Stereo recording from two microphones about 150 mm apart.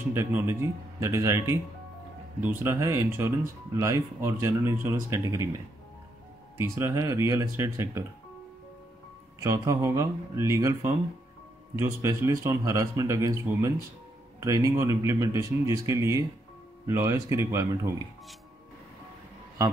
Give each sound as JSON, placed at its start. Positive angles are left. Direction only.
{"t": 0.1, "sound": "speech", "side_deg": -15}
{"t": 6.6, "sound": "a man's voice", "side_deg": -20}
{"t": 9.4, "sound": "a man's voice", "side_deg": -20}